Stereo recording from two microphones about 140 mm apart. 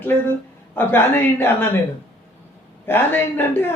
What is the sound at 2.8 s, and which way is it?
Speech, 15° left (ahead or behind).